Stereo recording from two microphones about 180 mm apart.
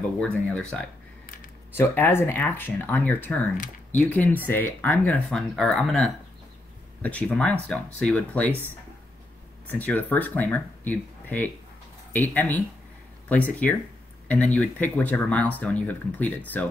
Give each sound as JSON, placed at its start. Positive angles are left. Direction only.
{"t": 0.5, "sound": "speech", "side_deg": 5}
{"t": 1.2, "sound": "a sound", "side_deg": 50}
{"t": 1.8, "sound": "speech", "side_deg": 15}
{"t": 9.7, "sound": "speech", "side_deg": 10}